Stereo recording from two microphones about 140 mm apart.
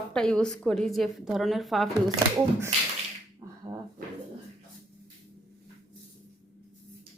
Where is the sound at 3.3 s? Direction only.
30° right (ahead or behind).